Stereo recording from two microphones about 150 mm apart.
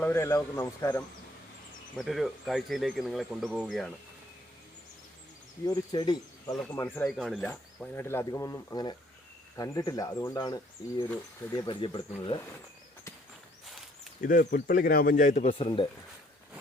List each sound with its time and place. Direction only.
0.0 s speech: 15° left (ahead or behind)
2.0 s speech: centre (ahead or behind)
5.6 s speech: 25° left (ahead or behind)
7.1 s speech: centre (ahead or behind)
7.5 s speech: 15° left (ahead or behind); by 12.4 s 35° left (ahead or behind)
14.2 s speech: 70° left (ahead or behind)
15.4 s speech: 35° left (ahead or behind)